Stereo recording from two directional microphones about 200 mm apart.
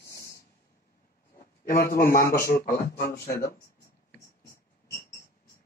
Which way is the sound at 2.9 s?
50° left (ahead or behind).